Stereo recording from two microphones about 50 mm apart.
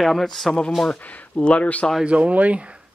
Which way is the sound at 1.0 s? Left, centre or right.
Left.